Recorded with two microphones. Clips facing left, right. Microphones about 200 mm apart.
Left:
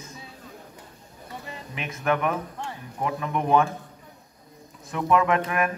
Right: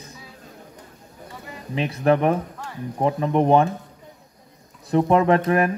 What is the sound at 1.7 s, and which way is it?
Speech, 35° right (ahead or behind).